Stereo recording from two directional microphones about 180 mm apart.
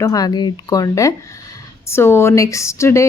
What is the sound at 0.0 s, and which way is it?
A woman's voice, 20° left (ahead or behind).